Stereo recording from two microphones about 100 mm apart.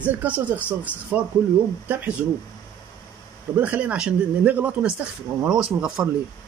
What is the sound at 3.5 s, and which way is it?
Speech, 15° right (ahead or behind).